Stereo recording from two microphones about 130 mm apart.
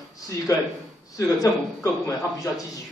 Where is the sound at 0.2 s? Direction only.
25° left (ahead or behind).